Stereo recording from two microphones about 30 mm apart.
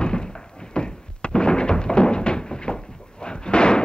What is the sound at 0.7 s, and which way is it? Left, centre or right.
Thunk, left.